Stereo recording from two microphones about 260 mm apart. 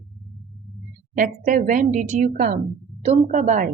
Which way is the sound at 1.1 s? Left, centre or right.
Right.